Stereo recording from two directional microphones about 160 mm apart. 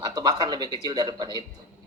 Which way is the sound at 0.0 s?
25° right (ahead or behind).